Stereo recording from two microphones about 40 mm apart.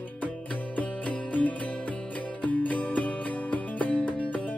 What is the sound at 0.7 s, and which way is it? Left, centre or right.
Music, left.